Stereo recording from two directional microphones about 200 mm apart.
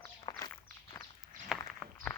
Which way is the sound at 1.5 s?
Centre (ahead or behind).